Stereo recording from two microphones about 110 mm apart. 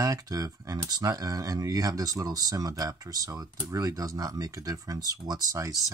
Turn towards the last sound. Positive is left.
turn(degrees=-30)  # may be behind; listen again after turning